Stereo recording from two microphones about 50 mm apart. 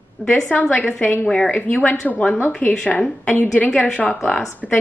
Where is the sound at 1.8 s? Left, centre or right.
Left.